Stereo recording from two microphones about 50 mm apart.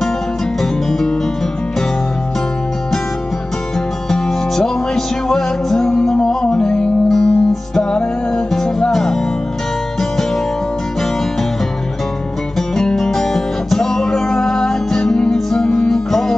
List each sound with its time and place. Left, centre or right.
0.6 s music: centre
4.1 s music: centre
12.5 s music: centre